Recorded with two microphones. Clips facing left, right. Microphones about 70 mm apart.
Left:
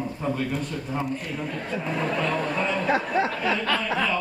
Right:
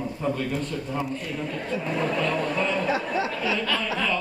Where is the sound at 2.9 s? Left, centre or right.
Left.